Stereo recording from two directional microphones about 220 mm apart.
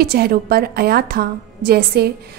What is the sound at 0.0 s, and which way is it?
A woman's voice, 45° right (ahead or behind).